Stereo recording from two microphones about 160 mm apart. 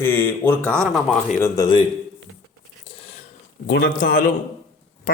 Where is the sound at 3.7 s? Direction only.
80° left.